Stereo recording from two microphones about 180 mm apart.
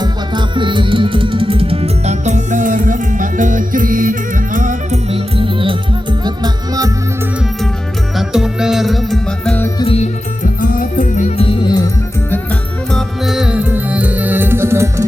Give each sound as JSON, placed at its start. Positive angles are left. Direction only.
{"t": 0.0, "sound": "music", "side_deg": -25}
{"t": 5.1, "sound": "music", "side_deg": -30}
{"t": 8.1, "sound": "music", "side_deg": -5}
{"t": 9.7, "sound": "music", "side_deg": 30}
{"t": 10.4, "sound": "music", "side_deg": 50}
{"t": 11.3, "sound": "music", "side_deg": 30}
{"t": 12.9, "sound": "music", "side_deg": 0}